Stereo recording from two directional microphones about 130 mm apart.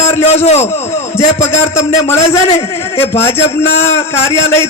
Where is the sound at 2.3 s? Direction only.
50° left (ahead or behind).